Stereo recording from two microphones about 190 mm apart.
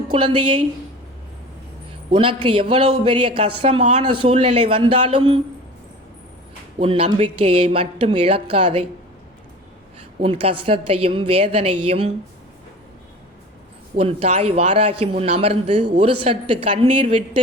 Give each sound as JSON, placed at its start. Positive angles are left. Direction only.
{"t": 0.1, "sound": "speech", "side_deg": -25}
{"t": 2.1, "sound": "speech", "side_deg": -25}
{"t": 6.7, "sound": "speech", "side_deg": -30}
{"t": 10.2, "sound": "a man's voice", "side_deg": -30}
{"t": 13.9, "sound": "a man's voice", "side_deg": -30}